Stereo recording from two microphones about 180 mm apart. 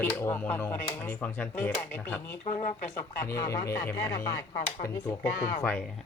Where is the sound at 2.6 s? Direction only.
40° left (ahead or behind).